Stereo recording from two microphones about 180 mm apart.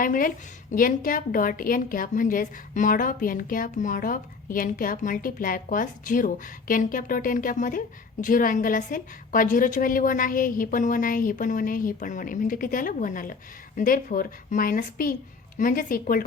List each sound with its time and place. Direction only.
0.0 s a woman's voice: 50° left (ahead or behind)